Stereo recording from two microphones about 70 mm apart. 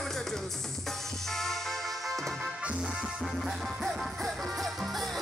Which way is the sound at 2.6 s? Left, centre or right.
Centre.